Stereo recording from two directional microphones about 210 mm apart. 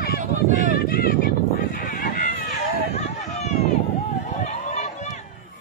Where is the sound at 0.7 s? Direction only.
45° left (ahead or behind).